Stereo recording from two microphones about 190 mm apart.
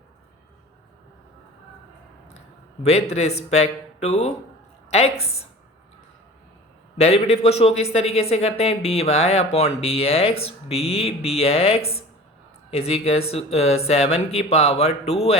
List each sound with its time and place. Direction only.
2.8 s a woman's voice: 35° left (ahead or behind)
7.0 s speech: 35° left (ahead or behind)